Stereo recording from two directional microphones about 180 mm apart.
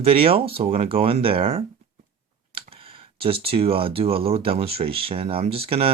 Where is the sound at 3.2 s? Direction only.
30° right (ahead or behind).